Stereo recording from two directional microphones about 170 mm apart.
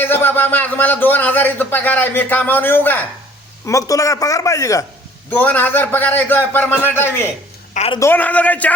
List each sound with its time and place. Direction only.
0.0 s a man's voice: 15° left (ahead or behind)
7.7 s a sound: 40° left (ahead or behind)
7.9 s a man's voice: 15° left (ahead or behind)